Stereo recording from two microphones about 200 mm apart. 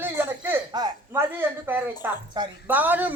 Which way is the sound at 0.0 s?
10° right (ahead or behind).